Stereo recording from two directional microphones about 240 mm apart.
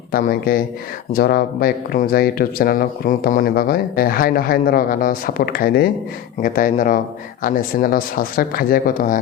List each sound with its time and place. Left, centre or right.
0.1 s speech: left